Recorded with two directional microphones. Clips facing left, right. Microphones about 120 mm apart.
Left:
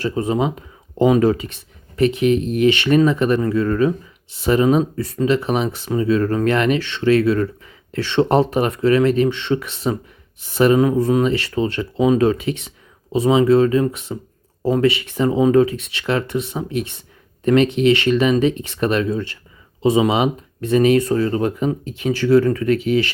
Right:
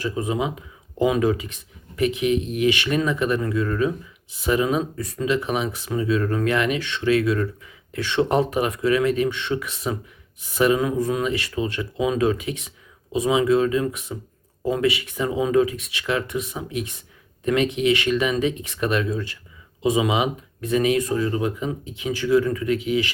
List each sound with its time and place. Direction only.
0.3 s speech: 35° left (ahead or behind)